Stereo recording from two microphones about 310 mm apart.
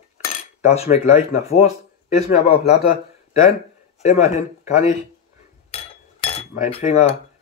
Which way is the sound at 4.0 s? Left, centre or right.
Left.